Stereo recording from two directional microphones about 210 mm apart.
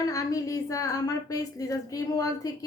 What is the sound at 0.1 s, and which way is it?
Speech, 15° left (ahead or behind).